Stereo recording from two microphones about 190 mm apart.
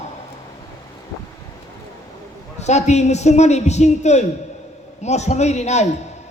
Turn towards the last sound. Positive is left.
turn(degrees=35)  # may be behind; listen again after turning